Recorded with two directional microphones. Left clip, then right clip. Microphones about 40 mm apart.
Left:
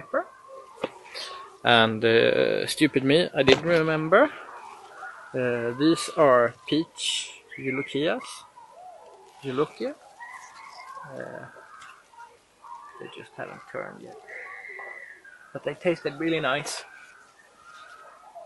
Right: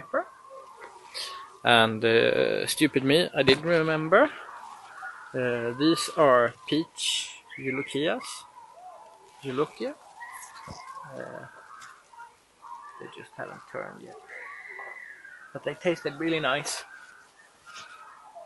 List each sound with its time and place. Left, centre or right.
0.0 s a sound: centre
1.1 s speech: centre
9.4 s fowl: centre
13.0 s speech: centre